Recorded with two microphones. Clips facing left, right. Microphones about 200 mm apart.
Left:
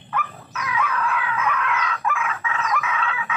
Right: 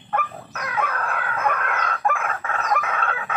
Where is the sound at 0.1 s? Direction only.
50° right (ahead or behind).